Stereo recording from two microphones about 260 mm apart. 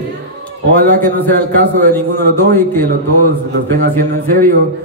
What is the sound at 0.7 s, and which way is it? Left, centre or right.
Speech, right.